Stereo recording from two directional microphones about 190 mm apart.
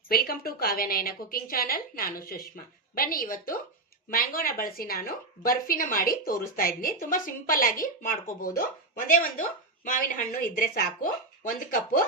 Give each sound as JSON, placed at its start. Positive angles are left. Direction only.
{"t": 0.1, "sound": "a woman's voice", "side_deg": 55}